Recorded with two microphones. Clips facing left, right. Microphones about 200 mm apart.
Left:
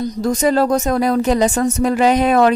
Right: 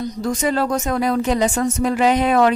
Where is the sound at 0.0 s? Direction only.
40° left (ahead or behind).